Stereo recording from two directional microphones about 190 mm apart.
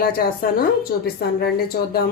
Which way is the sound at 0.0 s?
50° left (ahead or behind).